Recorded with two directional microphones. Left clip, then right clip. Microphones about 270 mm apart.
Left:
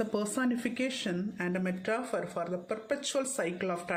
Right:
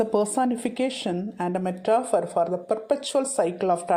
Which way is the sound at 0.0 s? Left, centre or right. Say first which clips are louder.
Right 9 dB; centre.